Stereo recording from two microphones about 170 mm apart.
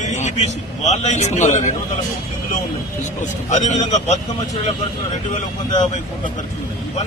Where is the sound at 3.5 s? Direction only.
45° left (ahead or behind).